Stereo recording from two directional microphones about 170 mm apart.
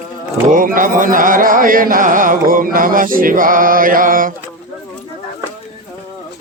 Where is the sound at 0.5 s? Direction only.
55° right (ahead or behind).